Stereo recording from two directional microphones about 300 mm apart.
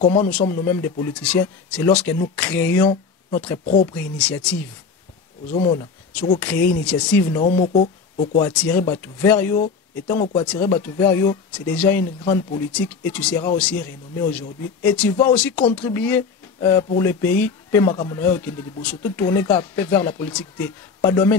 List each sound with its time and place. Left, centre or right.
0.2 s a man's voice: centre
5.5 s speech: centre
6.8 s a man's voice: centre
7.6 s speech: left
8.5 s a man's voice: centre